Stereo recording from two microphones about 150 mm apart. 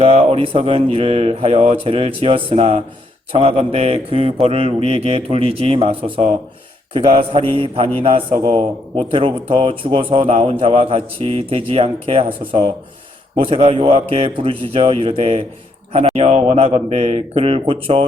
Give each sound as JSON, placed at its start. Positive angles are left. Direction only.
{"t": 0.0, "sound": "speech", "side_deg": -40}